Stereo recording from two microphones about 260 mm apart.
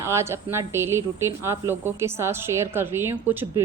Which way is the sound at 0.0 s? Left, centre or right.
Centre.